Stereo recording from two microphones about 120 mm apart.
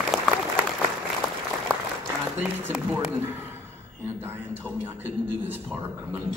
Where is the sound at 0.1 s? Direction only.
Centre (ahead or behind).